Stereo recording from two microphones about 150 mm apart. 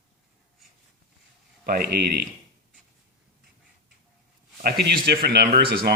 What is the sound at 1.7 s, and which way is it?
Speech, 90° right.